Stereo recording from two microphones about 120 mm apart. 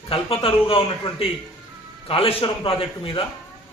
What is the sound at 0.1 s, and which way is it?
A man's voice, 50° left (ahead or behind).